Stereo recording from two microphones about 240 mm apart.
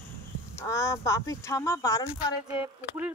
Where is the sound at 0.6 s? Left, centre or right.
Centre.